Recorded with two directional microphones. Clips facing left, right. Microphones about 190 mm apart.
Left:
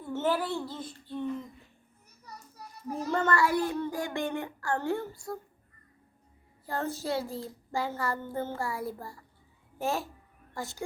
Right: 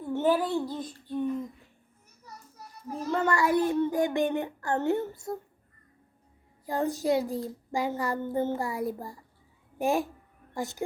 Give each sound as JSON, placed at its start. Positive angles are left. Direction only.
{"t": 0.0, "sound": "a child's voice", "side_deg": -15}
{"t": 3.1, "sound": "speech", "side_deg": -5}
{"t": 3.3, "sound": "a child's voice", "side_deg": -20}
{"t": 6.7, "sound": "a child's voice", "side_deg": -15}